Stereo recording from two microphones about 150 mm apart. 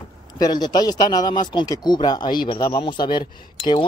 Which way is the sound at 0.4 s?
30° left (ahead or behind).